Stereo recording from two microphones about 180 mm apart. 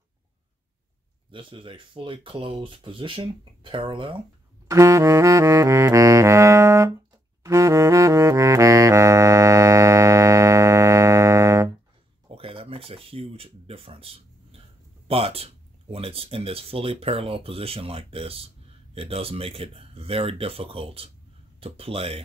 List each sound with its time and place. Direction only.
1.3 s speech: 30° right (ahead or behind)
4.6 s saxophone: 15° right (ahead or behind)
12.3 s a sound: 30° right (ahead or behind)
15.0 s speech: 30° right (ahead or behind)